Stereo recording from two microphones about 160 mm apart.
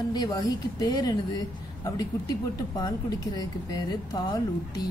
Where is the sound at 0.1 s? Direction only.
25° left (ahead or behind).